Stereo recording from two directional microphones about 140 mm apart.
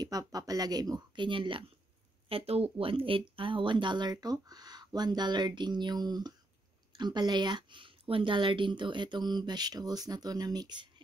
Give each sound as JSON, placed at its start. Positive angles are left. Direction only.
{"t": 0.0, "sound": "speech", "side_deg": -25}